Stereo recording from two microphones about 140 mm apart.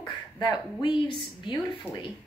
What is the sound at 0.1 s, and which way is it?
Speech, 30° left (ahead or behind).